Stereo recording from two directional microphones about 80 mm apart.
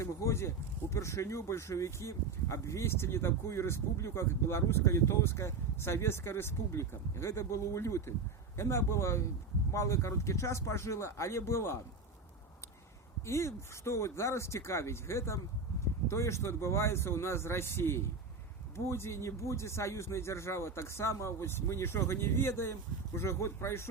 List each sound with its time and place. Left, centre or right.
0.0 s speech: left
13.2 s speech: left